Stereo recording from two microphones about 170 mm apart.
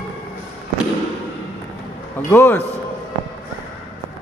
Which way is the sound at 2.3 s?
10° left (ahead or behind).